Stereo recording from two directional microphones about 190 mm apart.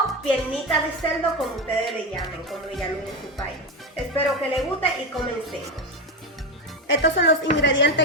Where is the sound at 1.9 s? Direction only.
Centre (ahead or behind).